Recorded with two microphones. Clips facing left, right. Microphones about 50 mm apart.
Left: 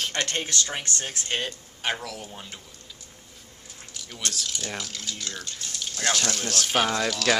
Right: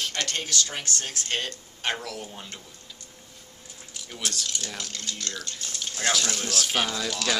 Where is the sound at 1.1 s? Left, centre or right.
Centre.